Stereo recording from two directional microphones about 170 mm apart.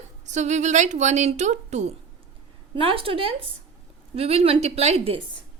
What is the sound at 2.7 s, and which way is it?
A woman's voice, 30° right (ahead or behind).